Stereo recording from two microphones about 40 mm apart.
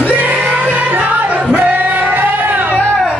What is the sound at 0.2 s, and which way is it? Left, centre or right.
Music, right.